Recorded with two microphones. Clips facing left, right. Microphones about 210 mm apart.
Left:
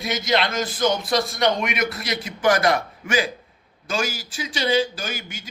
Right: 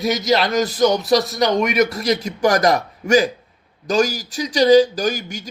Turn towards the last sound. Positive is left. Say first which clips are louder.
# right 10 dB
turn(degrees=-40)  # may be behind; listen again after turning